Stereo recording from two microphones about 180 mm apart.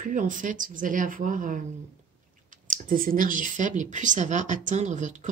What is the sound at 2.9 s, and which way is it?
Speech, 50° right (ahead or behind).